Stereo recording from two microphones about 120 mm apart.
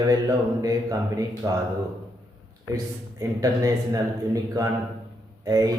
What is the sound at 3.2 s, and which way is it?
Speech, 30° right (ahead or behind).